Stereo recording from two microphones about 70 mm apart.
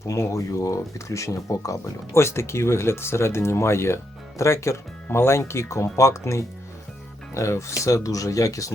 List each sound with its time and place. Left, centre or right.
0.0 s speech: left